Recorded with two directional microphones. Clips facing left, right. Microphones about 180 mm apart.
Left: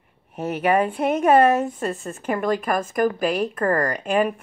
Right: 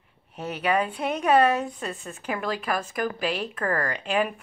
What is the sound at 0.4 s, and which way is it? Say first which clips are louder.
A woman's voice: left 5 dB; 50° left (ahead or behind).